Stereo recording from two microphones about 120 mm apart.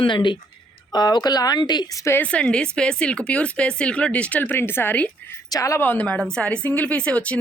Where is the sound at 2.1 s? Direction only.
10° left (ahead or behind).